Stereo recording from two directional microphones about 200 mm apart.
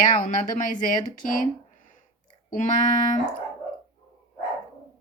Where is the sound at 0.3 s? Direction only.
40° left (ahead or behind).